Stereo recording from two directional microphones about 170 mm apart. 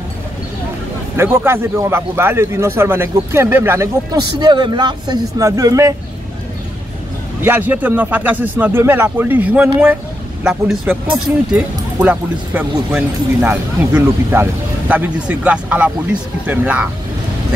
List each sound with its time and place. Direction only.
1.1 s speech: 15° right (ahead or behind)
7.4 s speech: 10° right (ahead or behind)